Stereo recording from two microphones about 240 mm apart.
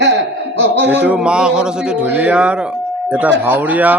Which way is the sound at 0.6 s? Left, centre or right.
Right.